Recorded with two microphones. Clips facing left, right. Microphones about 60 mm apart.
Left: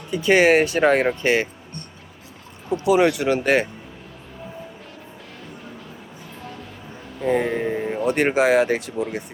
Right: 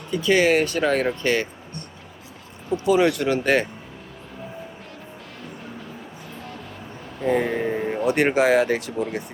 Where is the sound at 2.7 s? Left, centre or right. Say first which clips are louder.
Left 1 dB; centre.